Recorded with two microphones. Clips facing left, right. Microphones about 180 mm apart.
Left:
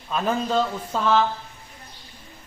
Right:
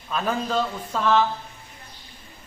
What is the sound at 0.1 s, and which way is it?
A man's voice, centre (ahead or behind).